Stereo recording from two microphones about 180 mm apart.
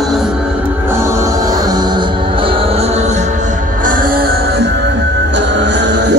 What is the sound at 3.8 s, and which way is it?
Music, 50° right (ahead or behind).